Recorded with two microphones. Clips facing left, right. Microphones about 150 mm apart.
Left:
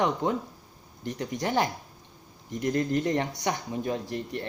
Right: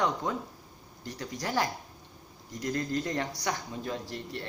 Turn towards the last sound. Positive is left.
turn(degrees=20)  # may be behind; listen again after turning